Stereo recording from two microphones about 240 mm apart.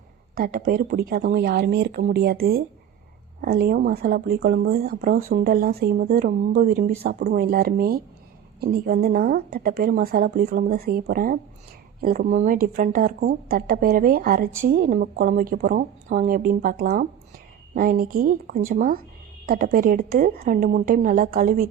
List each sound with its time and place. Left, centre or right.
0.3 s speech: right